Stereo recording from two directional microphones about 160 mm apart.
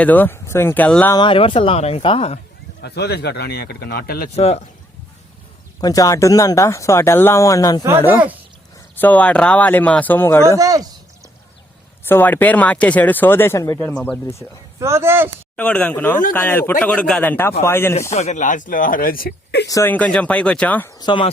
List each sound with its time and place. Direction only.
0.0 s speech: 10° left (ahead or behind)
1.1 s speech: 30° left (ahead or behind)
2.8 s speech: 90° left; by 4.3 s 70° left (ahead or behind)
4.4 s speech: 40° left (ahead or behind)
5.8 s speech: 20° left (ahead or behind)
9.0 s speech: 10° left (ahead or behind)
10.6 s speech: 25° right (ahead or behind)
12.0 s speech: 10° left (ahead or behind)
14.8 s speech: 15° right (ahead or behind)
15.5 s speech: 10° left (ahead or behind)
18.1 s speech: 45° left (ahead or behind); by 19.6 s 80° left
19.6 s speech: 20° left (ahead or behind)
21.0 s speech: 30° left (ahead or behind)